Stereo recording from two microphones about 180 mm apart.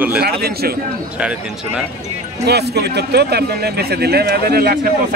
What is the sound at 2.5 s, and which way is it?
Speech, 65° right (ahead or behind).